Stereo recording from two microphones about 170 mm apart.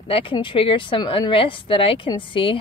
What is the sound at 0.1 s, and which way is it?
Speech, 30° left (ahead or behind).